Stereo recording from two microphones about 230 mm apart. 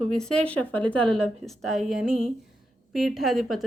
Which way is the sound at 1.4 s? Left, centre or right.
Centre.